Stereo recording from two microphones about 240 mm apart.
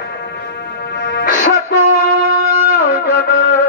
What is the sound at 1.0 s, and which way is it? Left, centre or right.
Music, left.